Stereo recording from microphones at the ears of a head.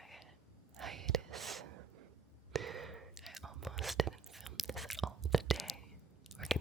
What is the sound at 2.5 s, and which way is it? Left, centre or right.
Sigh, right.